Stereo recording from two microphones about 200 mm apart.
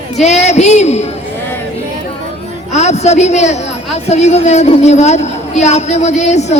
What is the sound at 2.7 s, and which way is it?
A woman's voice, 35° left (ahead or behind).